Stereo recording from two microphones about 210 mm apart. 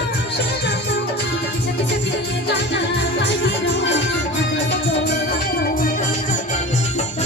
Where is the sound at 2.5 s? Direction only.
55° left (ahead or behind).